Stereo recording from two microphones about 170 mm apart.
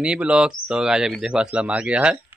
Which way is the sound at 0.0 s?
5° right (ahead or behind).